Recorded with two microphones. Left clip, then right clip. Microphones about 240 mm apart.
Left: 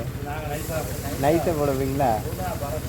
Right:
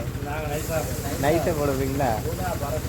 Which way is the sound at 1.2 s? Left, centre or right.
Left.